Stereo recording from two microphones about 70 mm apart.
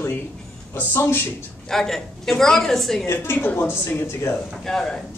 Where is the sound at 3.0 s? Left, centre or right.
Left.